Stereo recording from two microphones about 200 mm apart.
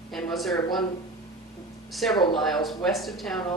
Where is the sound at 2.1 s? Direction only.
25° left (ahead or behind).